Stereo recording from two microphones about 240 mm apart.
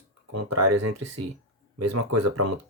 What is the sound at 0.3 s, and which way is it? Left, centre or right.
Speech, right.